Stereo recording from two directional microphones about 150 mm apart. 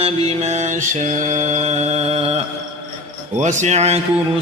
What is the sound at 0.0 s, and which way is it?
Mantra, 50° right (ahead or behind).